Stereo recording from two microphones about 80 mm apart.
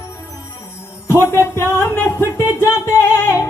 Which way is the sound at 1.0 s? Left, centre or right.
Left.